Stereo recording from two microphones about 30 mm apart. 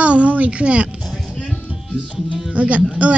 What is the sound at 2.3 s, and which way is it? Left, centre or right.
Music, right.